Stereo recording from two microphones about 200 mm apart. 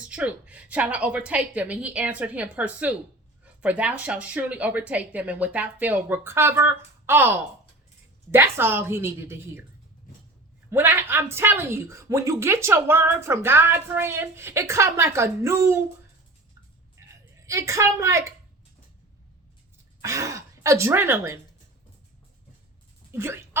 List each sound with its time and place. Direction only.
0.0 s a woman's voice: 5° right (ahead or behind)
10.7 s a woman's voice: 10° right (ahead or behind)
17.4 s a woman's voice: 15° right (ahead or behind)
20.0 s speech: 15° right (ahead or behind)
23.1 s a woman's voice: 10° right (ahead or behind)